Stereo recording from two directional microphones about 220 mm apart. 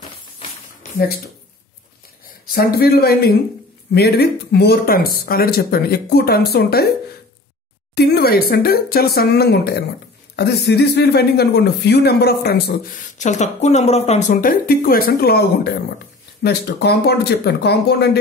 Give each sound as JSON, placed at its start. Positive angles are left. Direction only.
{"t": 2.5, "sound": "speech", "side_deg": 45}
{"t": 7.9, "sound": "speech", "side_deg": 45}